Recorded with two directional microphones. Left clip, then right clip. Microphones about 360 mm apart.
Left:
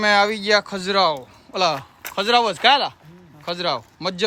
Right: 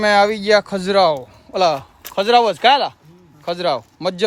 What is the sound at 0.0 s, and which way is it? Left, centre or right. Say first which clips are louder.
Speech: right 3 dB; centre.